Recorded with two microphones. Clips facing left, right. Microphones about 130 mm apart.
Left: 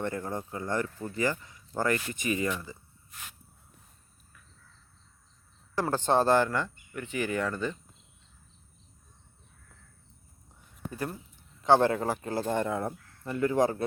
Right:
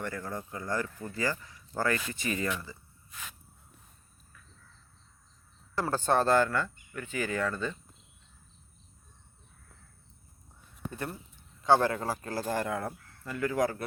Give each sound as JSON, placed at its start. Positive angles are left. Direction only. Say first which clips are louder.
{"t": 0.0, "sound": "speech", "louder": "left 4 dB", "side_deg": 25}
{"t": 5.7, "sound": "speech", "louder": "left 2 dB", "side_deg": 25}
{"t": 11.6, "sound": "speech", "louder": "left 2 dB", "side_deg": 20}